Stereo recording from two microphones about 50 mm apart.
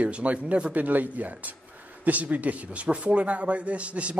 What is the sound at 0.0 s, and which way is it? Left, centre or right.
A man's voice, right.